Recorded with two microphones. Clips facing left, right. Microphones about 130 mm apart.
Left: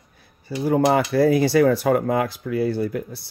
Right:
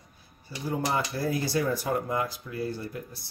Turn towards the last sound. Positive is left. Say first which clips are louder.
# left 11 dB
turn(degrees=80)